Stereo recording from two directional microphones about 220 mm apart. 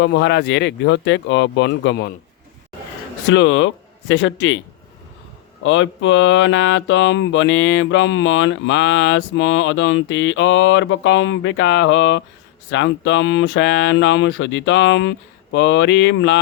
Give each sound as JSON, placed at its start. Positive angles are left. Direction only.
{"t": 0.0, "sound": "speech", "side_deg": 55}
{"t": 3.2, "sound": "mantra", "side_deg": 55}
{"t": 5.6, "sound": "mantra", "side_deg": 60}